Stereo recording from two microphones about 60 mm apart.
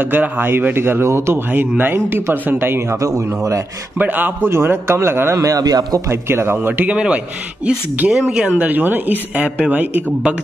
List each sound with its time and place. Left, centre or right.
0.0 s a man's voice: right
1.5 s speech: right
3.0 s a man's voice: right
4.0 s speech: right
4.5 s a man's voice: right
5.3 s a man's voice: right
6.0 s a man's voice: right
6.9 s a man's voice: centre
8.5 s speech: right